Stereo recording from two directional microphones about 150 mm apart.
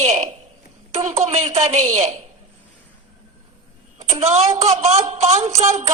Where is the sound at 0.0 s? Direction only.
50° right (ahead or behind).